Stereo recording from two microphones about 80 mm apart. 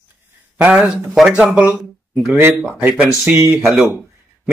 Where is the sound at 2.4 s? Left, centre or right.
Right.